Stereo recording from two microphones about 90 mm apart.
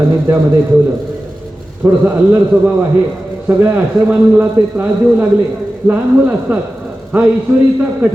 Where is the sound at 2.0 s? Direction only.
20° right (ahead or behind).